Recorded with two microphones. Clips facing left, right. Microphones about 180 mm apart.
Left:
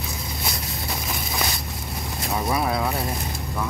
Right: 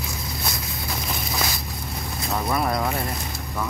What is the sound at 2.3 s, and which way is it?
Speech, 5° left (ahead or behind).